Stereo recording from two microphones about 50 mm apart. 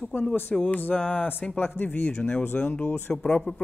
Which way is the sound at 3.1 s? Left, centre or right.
Centre.